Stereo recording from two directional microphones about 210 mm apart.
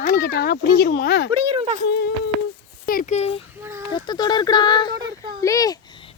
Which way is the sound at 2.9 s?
40° left (ahead or behind).